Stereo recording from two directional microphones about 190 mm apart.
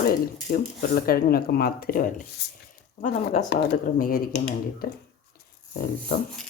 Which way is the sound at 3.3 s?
35° left (ahead or behind).